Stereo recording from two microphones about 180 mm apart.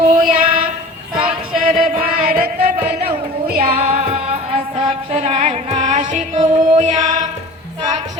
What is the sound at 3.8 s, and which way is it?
Music, 35° right (ahead or behind).